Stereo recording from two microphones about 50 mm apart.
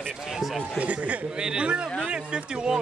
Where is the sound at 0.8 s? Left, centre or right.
Right.